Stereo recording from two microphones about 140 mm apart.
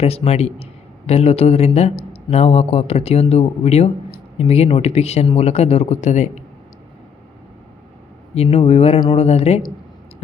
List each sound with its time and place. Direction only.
0.0 s speech: 45° left (ahead or behind)
8.4 s speech: 45° left (ahead or behind)